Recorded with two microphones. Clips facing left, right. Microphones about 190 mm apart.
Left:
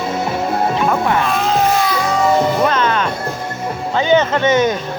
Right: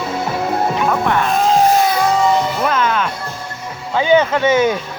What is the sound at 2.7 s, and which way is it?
Music, 5° right (ahead or behind).